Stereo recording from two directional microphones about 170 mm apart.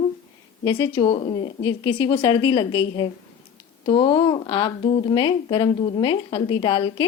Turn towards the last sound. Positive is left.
turn(degrees=30)  # may be behind; listen again after turning